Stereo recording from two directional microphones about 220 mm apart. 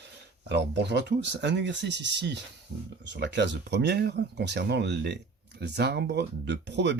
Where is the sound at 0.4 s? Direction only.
50° right (ahead or behind).